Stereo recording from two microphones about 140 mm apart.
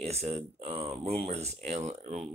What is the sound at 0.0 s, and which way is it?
Speech, 50° right (ahead or behind).